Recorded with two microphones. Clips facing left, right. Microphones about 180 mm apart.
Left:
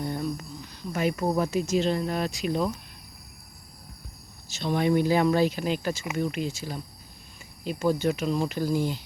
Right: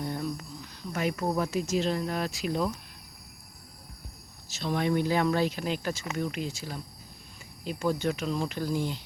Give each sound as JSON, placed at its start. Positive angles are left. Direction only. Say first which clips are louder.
{"t": 0.0, "sound": "a sound", "louder": "left 3 dB", "side_deg": 0}
{"t": 1.4, "sound": "speech", "louder": "left 3 dB", "side_deg": 0}
{"t": 4.4, "sound": "speech", "louder": "left 4 dB", "side_deg": 0}